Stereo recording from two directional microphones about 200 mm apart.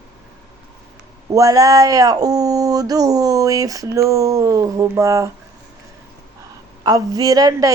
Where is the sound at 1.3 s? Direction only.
15° right (ahead or behind).